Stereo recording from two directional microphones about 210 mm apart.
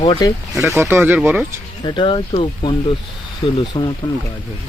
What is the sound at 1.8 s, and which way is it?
Speech, 20° left (ahead or behind).